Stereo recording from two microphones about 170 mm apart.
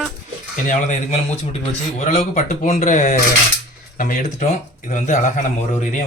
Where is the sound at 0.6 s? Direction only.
45° left (ahead or behind).